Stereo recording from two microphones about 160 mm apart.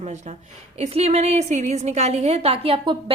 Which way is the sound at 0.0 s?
45° right (ahead or behind).